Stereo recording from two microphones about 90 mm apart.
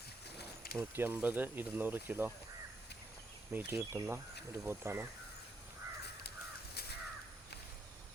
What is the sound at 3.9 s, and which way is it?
Speech, 30° right (ahead or behind).